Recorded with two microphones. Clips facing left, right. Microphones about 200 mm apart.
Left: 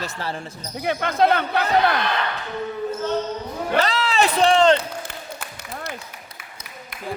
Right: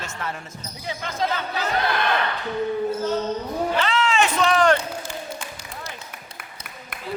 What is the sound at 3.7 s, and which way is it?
A man's voice, 40° left (ahead or behind).